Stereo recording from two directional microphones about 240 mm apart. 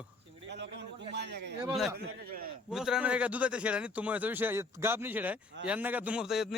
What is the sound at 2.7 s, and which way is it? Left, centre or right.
A man's voice, centre.